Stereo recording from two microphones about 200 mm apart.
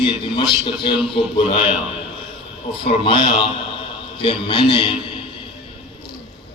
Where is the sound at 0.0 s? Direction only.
25° left (ahead or behind).